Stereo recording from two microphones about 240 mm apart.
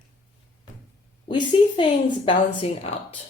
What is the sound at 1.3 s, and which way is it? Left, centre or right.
Speech, centre.